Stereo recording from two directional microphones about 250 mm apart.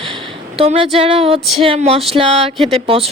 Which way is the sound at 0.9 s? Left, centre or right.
Right.